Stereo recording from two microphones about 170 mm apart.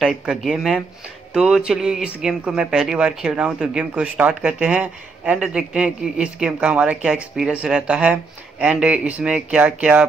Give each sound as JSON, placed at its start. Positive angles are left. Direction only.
{"t": 0.0, "sound": "speech", "side_deg": 0}